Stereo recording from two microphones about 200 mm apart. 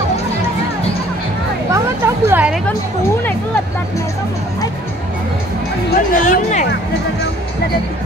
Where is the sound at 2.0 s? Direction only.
10° right (ahead or behind).